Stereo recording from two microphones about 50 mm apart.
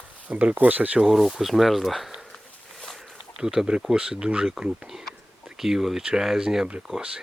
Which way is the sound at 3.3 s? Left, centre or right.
Centre.